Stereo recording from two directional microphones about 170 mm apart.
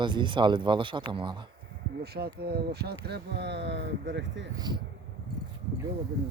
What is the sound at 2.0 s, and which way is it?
Speech, 70° right (ahead or behind).